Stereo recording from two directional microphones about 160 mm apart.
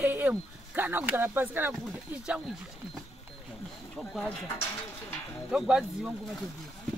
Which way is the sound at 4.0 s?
Centre (ahead or behind).